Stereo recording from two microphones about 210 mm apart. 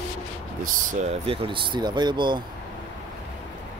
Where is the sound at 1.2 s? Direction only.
25° right (ahead or behind).